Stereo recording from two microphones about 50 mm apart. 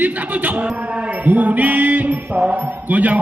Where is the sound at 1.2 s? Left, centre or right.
Right.